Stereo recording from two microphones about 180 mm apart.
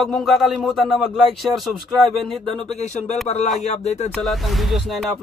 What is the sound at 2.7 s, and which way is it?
Speech, 40° left (ahead or behind).